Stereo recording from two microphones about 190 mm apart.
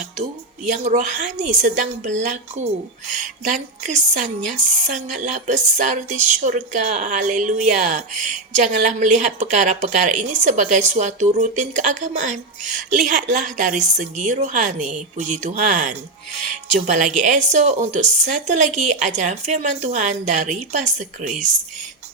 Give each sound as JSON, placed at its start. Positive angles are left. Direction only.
{"t": 0.7, "sound": "a woman's voice", "side_deg": -40}